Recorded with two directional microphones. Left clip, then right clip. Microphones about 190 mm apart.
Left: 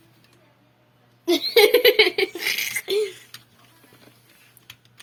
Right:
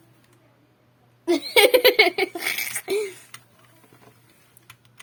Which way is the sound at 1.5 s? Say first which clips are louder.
Even; 55° right (ahead or behind).